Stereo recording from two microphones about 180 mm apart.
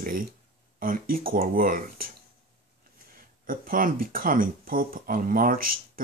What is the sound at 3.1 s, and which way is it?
Speech, 50° right (ahead or behind).